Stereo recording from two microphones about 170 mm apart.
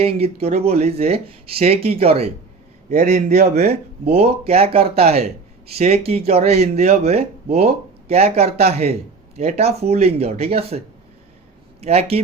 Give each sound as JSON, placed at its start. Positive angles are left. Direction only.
{"t": 0.4, "sound": "speech", "side_deg": -40}
{"t": 3.0, "sound": "a man's voice", "side_deg": -50}
{"t": 3.7, "sound": "speech", "side_deg": -35}
{"t": 11.8, "sound": "speech", "side_deg": -35}